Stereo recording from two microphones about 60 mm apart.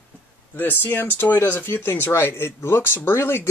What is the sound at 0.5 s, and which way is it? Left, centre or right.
Speech, left.